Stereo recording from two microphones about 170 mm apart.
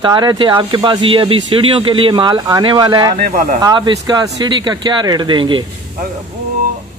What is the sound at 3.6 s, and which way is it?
Speech, 25° right (ahead or behind).